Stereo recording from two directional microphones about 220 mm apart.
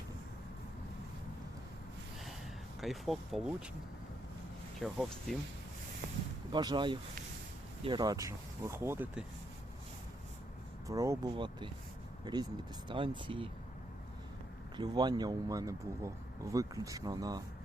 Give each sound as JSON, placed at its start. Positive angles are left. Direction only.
{"t": 2.8, "sound": "speech", "side_deg": 0}
{"t": 4.8, "sound": "speech", "side_deg": 0}
{"t": 6.5, "sound": "speech", "side_deg": -20}
{"t": 10.8, "sound": "speech", "side_deg": -15}
{"t": 14.8, "sound": "speech", "side_deg": -20}